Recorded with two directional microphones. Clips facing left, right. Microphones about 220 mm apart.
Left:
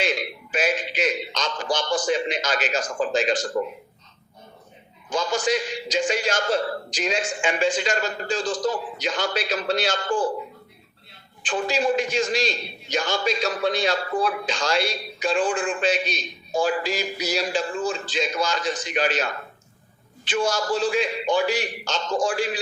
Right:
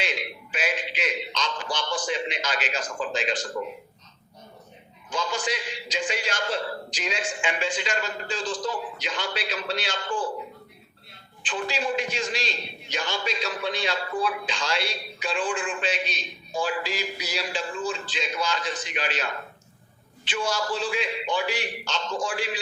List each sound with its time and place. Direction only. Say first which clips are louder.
0.0 s a sound: left 6 dB; 45° left (ahead or behind)
1.7 s a man's voice: left 7 dB; 45° left (ahead or behind)
5.0 s a man's voice: left 6 dB; 45° left (ahead or behind)
11.4 s a man's voice: left 6 dB; 45° left (ahead or behind)